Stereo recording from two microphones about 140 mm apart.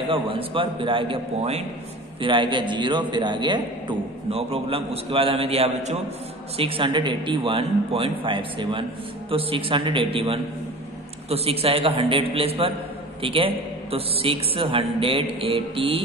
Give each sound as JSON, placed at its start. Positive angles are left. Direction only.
{"t": 0.1, "sound": "a man's voice", "side_deg": -40}